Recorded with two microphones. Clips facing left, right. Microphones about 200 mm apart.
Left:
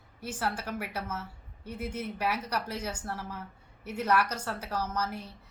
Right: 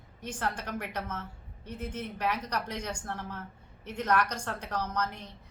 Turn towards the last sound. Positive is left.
turn(degrees=5)  # may be behind; listen again after turning